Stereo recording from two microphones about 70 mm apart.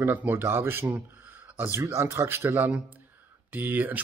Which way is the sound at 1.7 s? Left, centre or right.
Right.